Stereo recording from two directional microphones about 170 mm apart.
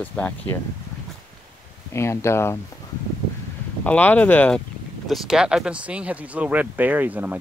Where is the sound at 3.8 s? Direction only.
10° left (ahead or behind).